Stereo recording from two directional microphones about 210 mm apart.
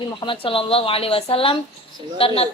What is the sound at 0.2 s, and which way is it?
Speech, 25° left (ahead or behind).